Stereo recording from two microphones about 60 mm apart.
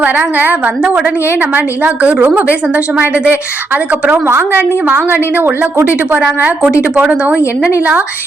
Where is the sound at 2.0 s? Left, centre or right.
Right.